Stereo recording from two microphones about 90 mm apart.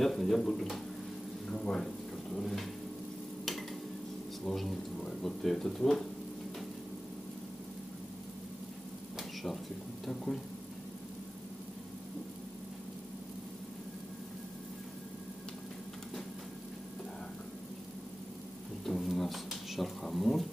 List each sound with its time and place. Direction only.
0.0 s speech: centre (ahead or behind)
4.5 s speech: 5° left (ahead or behind)
18.9 s a sound: 5° left (ahead or behind)